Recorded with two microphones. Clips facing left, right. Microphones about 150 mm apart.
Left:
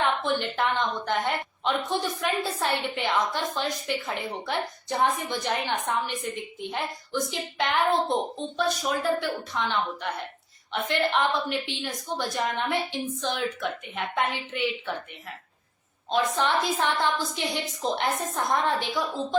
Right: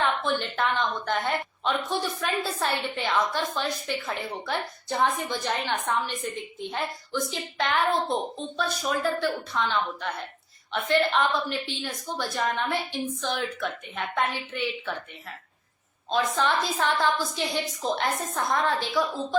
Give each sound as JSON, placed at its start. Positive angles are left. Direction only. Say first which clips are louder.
{"t": 0.0, "sound": "a woman's voice", "louder": "left 1 dB", "side_deg": 15}
{"t": 16.0, "sound": "a woman's voice", "louder": "even", "side_deg": 20}